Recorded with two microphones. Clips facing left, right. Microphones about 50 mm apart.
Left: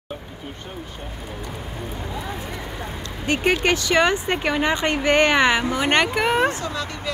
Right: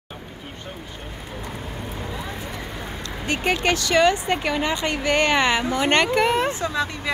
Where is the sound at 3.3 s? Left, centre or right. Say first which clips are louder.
Left 2 dB; centre.